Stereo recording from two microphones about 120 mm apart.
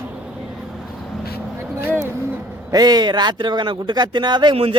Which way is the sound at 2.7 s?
35° right (ahead or behind).